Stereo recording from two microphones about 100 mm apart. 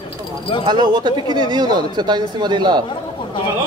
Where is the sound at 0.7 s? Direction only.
45° right (ahead or behind).